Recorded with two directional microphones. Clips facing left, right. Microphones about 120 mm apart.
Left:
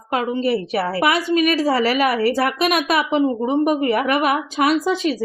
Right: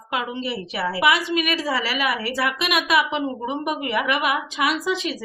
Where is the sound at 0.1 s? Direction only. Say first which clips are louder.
Left 7 dB; 45° left (ahead or behind).